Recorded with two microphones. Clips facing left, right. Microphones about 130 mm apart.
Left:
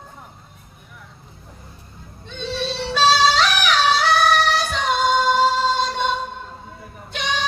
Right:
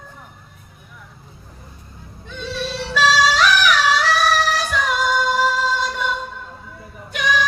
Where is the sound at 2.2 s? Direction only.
25° left (ahead or behind).